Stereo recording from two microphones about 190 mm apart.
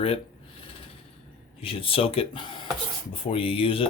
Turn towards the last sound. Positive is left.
turn(degrees=30)  # may be behind; listen again after turning